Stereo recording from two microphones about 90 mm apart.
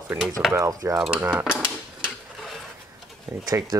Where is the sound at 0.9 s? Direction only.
5° right (ahead or behind).